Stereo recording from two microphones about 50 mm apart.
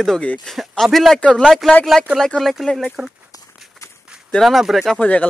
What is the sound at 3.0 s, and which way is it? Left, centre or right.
Speech, centre.